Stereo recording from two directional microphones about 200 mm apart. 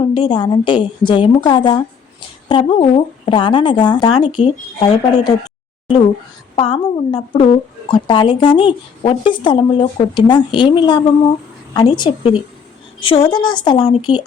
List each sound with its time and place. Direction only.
0.1 s a woman's voice: 20° left (ahead or behind)
6.6 s a woman's voice: 25° left (ahead or behind)